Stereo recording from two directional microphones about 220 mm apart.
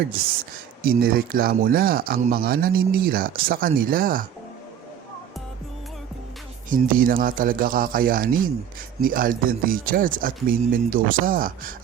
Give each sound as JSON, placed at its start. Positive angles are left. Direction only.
{"t": 0.8, "sound": "speech", "side_deg": -40}
{"t": 6.7, "sound": "speech", "side_deg": -40}